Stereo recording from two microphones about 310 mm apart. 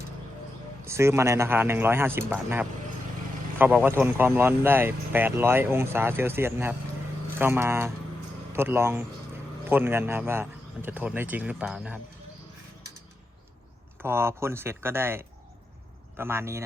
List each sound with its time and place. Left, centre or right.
0.9 s speech: centre
14.0 s speech: centre